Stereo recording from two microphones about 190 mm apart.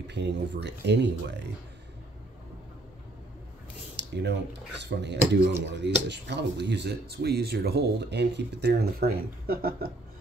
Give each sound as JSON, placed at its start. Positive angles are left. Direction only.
{"t": 0.0, "sound": "speech", "side_deg": -65}
{"t": 3.9, "sound": "a sound", "side_deg": -65}
{"t": 4.8, "sound": "speech", "side_deg": -65}